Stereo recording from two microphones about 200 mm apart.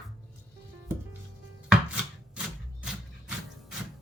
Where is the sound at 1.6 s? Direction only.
5° right (ahead or behind).